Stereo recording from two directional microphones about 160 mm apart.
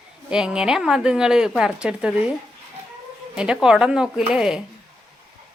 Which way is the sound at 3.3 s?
5° right (ahead or behind).